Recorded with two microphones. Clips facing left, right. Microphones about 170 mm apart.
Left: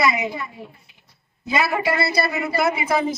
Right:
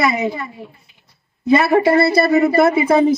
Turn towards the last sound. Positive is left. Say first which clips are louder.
# right 8 dB
turn(degrees=-55)  # may be behind; listen again after turning